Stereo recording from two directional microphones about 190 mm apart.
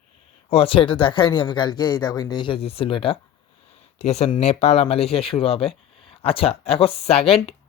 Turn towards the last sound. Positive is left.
turn(degrees=30)  # may be behind; listen again after turning